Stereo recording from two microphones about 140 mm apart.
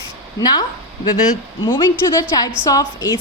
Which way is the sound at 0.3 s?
30° left (ahead or behind).